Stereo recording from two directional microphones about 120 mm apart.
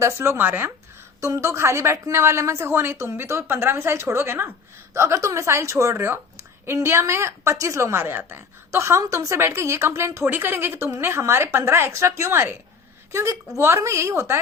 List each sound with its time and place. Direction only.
0.0 s a woman's voice: 20° right (ahead or behind)